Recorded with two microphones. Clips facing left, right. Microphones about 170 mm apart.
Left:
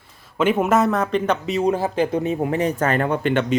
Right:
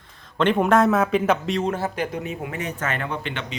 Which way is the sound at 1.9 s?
30° left (ahead or behind).